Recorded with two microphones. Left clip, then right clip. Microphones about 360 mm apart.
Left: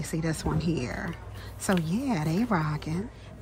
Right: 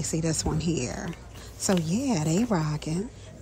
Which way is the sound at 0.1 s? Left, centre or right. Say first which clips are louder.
Right 1 dB; centre.